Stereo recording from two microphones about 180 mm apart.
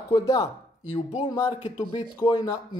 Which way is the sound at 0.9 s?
30° left (ahead or behind).